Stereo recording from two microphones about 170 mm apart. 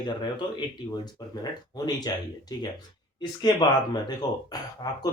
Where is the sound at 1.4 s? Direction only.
25° left (ahead or behind).